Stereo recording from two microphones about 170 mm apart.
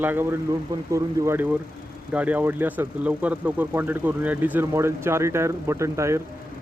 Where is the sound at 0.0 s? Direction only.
10° right (ahead or behind).